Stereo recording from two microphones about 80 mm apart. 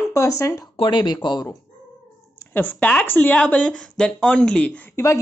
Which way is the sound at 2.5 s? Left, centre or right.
Centre.